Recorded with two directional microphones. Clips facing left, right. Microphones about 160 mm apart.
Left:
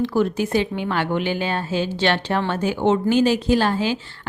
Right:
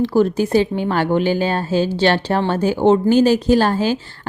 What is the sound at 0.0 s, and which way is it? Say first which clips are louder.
A woman's voice: right 4 dB; 35° right (ahead or behind).